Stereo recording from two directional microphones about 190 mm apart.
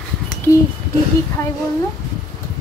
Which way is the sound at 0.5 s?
15° left (ahead or behind).